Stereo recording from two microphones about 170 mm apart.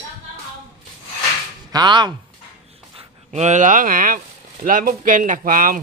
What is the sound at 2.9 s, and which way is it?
Speech, 35° right (ahead or behind).